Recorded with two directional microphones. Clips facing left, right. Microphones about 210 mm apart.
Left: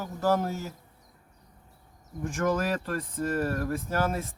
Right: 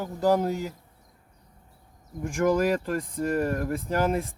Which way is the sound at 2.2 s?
10° right (ahead or behind).